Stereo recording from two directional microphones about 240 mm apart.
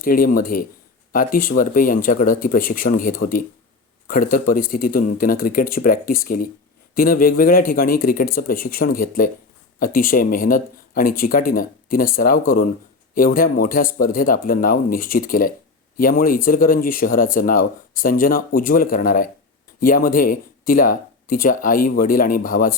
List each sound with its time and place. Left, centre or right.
0.0 s speech: left